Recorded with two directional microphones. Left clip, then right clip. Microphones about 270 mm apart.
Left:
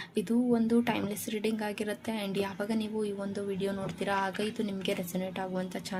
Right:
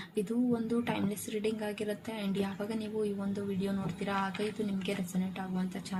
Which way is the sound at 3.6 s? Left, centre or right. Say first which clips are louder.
Left 4 dB; left.